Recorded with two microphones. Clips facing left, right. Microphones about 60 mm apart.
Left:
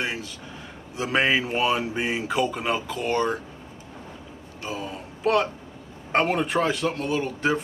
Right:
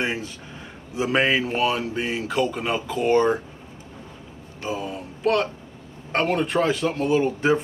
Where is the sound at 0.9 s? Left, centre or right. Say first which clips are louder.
Right 2 dB; centre.